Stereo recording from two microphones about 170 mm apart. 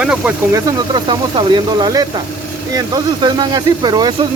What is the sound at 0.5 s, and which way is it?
Speech, 30° right (ahead or behind).